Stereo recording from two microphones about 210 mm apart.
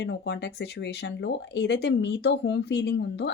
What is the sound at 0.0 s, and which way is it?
Speech, 55° left (ahead or behind).